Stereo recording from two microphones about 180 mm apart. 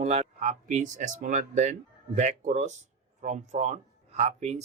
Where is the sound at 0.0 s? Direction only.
35° right (ahead or behind).